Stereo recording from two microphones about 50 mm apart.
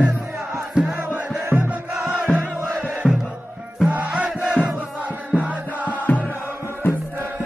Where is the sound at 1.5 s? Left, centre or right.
Left.